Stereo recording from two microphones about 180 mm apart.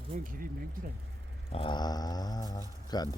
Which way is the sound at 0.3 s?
50° right (ahead or behind).